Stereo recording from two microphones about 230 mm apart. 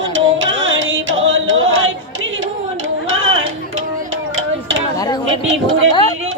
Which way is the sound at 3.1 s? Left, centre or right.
Right.